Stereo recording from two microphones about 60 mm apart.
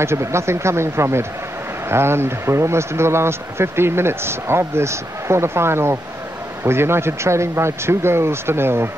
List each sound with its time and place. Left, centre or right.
0.0 s speech: right